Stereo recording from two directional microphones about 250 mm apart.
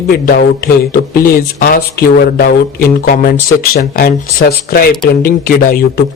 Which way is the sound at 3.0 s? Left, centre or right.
Left.